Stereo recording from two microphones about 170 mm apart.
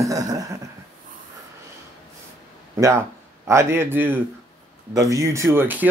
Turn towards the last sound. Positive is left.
turn(degrees=-10)  # may be behind; listen again after turning